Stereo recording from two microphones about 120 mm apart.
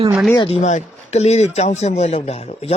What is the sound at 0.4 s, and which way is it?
A man's voice, 65° left (ahead or behind).